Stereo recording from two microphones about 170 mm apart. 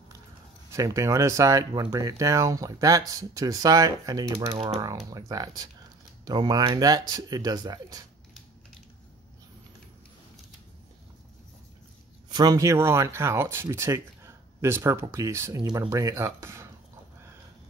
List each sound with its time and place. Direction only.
0.7 s speech: 15° right (ahead or behind)
4.5 s speech: 35° right (ahead or behind)
4.7 s speech: 20° right (ahead or behind)
12.3 s speech: 20° right (ahead or behind)